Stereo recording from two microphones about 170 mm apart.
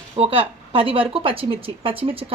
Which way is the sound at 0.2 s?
30° right (ahead or behind).